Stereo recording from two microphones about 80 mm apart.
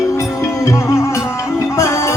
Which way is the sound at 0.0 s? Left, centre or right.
Left.